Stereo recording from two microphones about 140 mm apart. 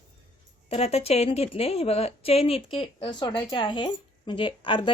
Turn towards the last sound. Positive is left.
turn(degrees=35)  # may be behind; listen again after turning